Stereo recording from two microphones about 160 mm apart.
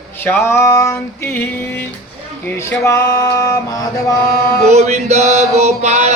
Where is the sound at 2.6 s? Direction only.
15° left (ahead or behind).